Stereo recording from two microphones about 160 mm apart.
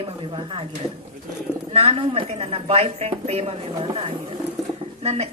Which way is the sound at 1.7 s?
35° right (ahead or behind).